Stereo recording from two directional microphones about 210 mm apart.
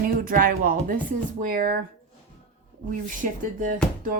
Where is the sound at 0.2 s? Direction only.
45° right (ahead or behind).